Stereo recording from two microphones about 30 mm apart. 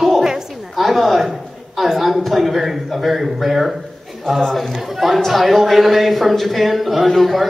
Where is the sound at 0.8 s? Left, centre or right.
Centre.